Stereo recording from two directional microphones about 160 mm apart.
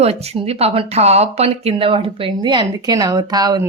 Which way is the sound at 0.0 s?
40° right (ahead or behind).